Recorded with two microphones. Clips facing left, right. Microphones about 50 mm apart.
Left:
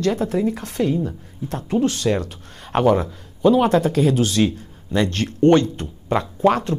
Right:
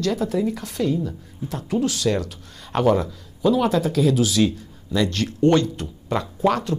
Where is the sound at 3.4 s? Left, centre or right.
Left.